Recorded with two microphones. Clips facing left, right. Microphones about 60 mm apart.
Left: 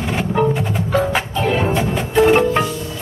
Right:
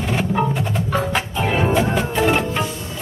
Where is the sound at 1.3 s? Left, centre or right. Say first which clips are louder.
Right 1 dB; centre.